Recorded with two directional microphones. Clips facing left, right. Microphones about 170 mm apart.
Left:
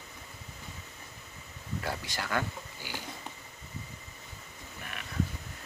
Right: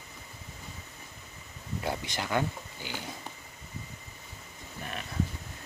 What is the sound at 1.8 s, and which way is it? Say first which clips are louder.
Speech: right 3 dB; 20° right (ahead or behind).